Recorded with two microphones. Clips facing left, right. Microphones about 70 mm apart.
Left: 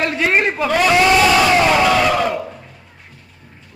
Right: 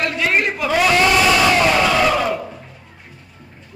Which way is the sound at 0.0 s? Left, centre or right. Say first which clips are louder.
Left 2 dB; left.